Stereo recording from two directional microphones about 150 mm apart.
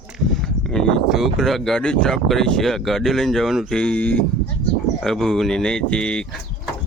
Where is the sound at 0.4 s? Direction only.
5° left (ahead or behind).